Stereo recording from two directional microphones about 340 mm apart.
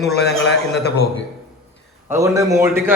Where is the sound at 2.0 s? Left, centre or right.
Centre.